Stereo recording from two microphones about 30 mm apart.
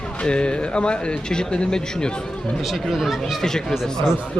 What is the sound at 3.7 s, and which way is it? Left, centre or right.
Speech, centre.